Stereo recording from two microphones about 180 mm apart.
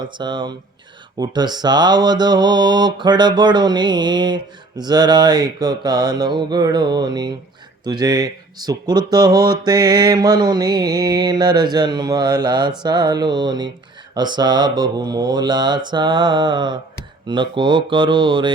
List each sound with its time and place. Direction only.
0.0 s speech: 25° right (ahead or behind)